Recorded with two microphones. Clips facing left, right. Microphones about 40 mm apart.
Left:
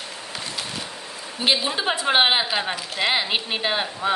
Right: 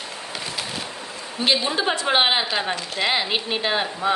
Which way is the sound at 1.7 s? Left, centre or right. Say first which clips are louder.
Even; centre.